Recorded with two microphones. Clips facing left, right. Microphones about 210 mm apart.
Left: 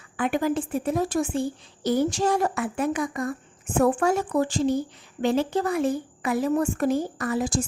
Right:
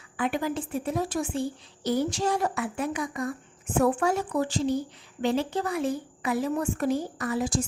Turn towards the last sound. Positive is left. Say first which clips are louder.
# left 2 dB
turn(degrees=50)  # may be behind; listen again after turning